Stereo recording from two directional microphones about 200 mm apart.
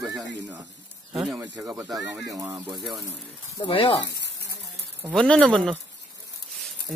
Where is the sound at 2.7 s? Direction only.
Centre (ahead or behind).